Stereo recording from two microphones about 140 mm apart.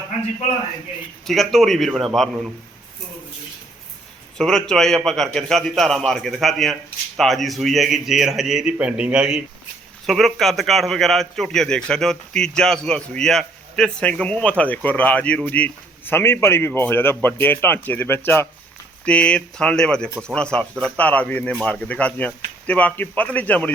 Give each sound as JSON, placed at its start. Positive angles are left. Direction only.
{"t": 1.2, "sound": "a man's voice", "side_deg": 0}
{"t": 4.4, "sound": "a man's voice", "side_deg": 5}